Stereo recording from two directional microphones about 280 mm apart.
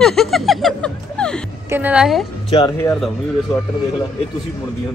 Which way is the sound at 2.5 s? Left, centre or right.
Centre.